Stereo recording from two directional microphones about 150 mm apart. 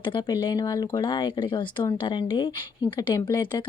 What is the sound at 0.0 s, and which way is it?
Speech, 30° left (ahead or behind).